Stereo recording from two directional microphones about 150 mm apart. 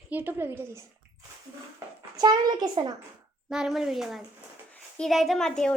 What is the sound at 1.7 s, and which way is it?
A child's voice, 25° right (ahead or behind).